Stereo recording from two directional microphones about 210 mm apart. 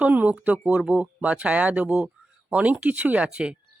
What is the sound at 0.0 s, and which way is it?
Speech, 5° right (ahead or behind).